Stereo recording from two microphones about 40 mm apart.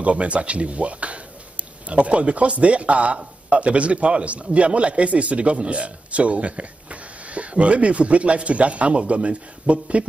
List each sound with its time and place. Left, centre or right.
0.0 s a man's voice: right